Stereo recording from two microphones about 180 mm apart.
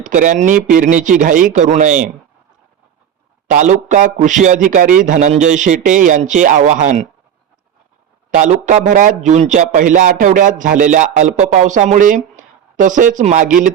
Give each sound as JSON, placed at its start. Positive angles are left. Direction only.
{"t": 0.0, "sound": "a man's voice", "side_deg": -45}
{"t": 3.4, "sound": "a man's voice", "side_deg": -45}
{"t": 8.3, "sound": "a man's voice", "side_deg": -45}